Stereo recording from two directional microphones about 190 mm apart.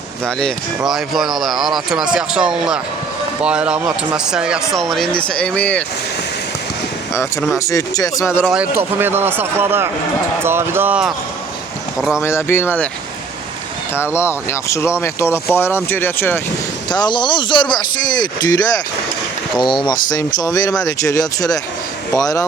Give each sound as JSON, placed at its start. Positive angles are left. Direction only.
{"t": 0.3, "sound": "speech", "side_deg": 5}
{"t": 7.6, "sound": "speech", "side_deg": 15}
{"t": 8.7, "sound": "speech", "side_deg": -10}
{"t": 12.2, "sound": "speech", "side_deg": 15}
{"t": 13.9, "sound": "speech", "side_deg": 15}
{"t": 16.9, "sound": "speech", "side_deg": 25}